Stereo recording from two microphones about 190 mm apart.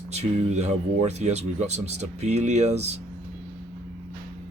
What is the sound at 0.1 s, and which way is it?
Speech, 35° right (ahead or behind).